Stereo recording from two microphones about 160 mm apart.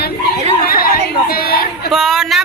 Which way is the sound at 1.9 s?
Centre (ahead or behind).